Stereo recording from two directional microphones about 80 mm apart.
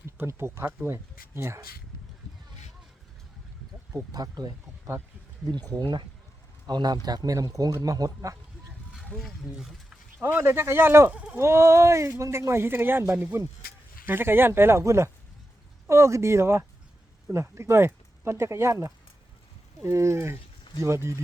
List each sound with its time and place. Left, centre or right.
0.2 s speech: right
4.1 s a man's voice: right
7.3 s speech: right
9.2 s speech: centre
10.2 s speech: right